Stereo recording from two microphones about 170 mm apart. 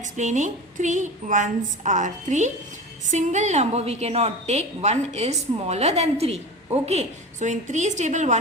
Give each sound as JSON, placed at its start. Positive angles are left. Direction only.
{"t": 0.0, "sound": "a woman's voice", "side_deg": -45}